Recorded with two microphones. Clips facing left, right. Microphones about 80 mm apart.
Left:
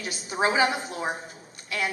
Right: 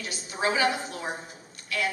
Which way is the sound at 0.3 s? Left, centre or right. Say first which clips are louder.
Left 2 dB; left.